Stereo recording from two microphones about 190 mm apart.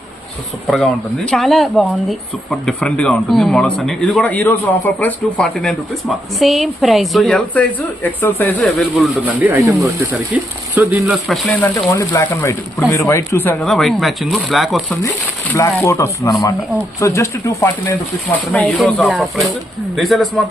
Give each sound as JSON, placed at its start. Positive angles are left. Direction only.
{"t": 1.3, "sound": "speech", "side_deg": 0}
{"t": 11.4, "sound": "speech", "side_deg": 10}
{"t": 15.0, "sound": "speech", "side_deg": 15}